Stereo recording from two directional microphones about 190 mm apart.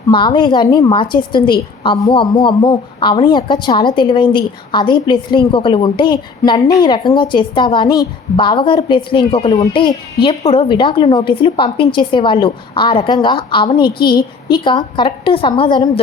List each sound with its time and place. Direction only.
0.1 s a woman's voice: 25° left (ahead or behind)